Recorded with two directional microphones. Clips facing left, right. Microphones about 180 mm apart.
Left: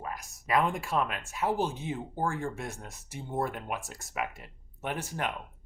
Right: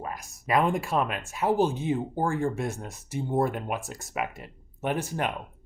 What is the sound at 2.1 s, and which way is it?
Speech, 30° right (ahead or behind).